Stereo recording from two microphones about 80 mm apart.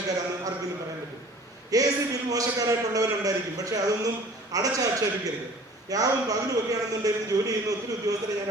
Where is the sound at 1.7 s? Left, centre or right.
Right.